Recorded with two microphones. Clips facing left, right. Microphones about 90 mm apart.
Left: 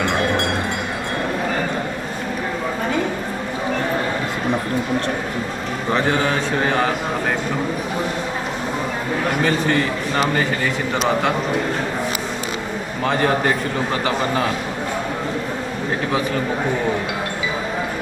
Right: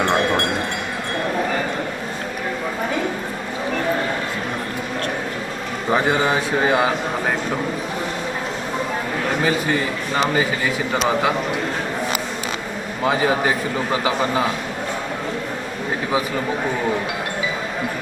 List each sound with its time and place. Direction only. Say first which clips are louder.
5.9 s a man's voice: right 1 dB; 15° right (ahead or behind)
9.4 s a man's voice: left 2 dB; 10° right (ahead or behind)
10.9 s a man's voice: even; 5° right (ahead or behind)
13.1 s a man's voice: even; 5° right (ahead or behind)